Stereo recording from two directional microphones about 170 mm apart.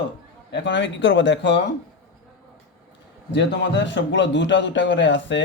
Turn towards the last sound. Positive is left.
turn(degrees=90)